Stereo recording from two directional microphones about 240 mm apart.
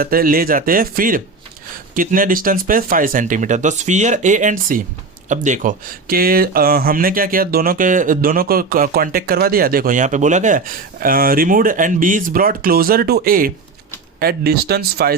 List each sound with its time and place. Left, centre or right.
0.0 s speech: right